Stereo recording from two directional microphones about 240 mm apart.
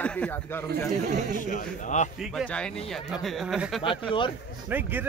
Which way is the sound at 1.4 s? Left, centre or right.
Left.